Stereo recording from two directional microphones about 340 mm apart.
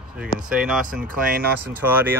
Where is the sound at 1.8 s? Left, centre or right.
Centre.